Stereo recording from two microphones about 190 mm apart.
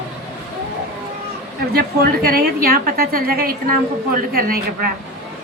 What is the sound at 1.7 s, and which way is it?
A woman's voice, 55° right (ahead or behind).